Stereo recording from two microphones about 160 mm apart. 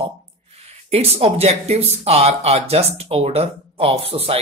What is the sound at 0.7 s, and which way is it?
Speech, 40° right (ahead or behind).